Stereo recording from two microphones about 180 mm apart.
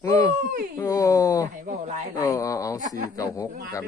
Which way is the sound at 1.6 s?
40° right (ahead or behind).